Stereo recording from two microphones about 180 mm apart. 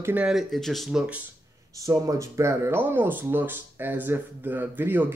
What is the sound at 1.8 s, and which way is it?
Speech, 15° right (ahead or behind).